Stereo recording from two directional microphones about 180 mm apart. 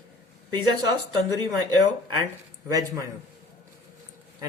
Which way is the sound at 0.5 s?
20° right (ahead or behind).